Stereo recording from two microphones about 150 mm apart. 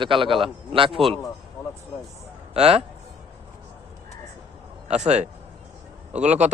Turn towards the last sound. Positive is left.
turn(degrees=-50)  # may be behind; listen again after turning